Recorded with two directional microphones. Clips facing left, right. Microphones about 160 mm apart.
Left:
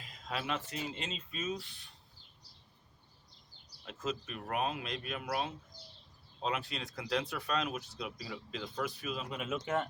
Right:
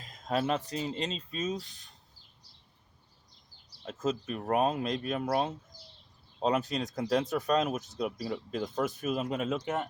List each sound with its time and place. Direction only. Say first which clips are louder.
0.0 s speech: right 9 dB; 45° right (ahead or behind)
3.8 s speech: right 7 dB; 40° right (ahead or behind)